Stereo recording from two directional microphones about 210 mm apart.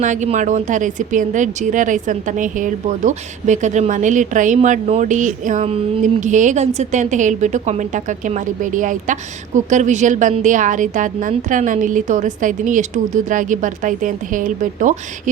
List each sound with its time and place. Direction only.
0.0 s speech: 35° right (ahead or behind)